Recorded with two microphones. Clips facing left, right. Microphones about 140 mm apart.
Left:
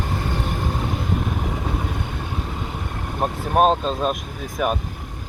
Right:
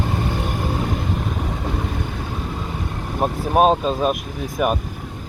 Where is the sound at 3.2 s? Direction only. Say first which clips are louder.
Right 2 dB; 5° right (ahead or behind).